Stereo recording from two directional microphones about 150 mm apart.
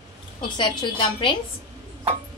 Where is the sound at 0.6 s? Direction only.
30° left (ahead or behind).